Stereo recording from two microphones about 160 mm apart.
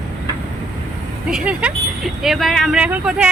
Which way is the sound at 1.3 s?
5° right (ahead or behind).